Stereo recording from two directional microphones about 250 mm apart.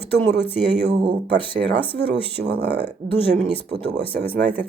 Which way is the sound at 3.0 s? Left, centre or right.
Centre.